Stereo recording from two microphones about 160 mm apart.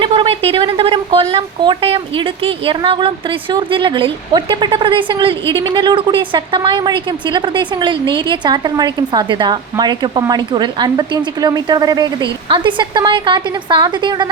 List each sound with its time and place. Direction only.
0.0 s a woman's voice: 35° right (ahead or behind)